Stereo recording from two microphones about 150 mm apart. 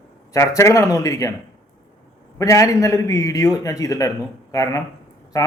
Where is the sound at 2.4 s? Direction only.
20° left (ahead or behind).